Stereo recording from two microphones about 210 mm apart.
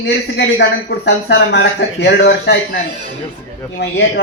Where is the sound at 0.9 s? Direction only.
55° left (ahead or behind).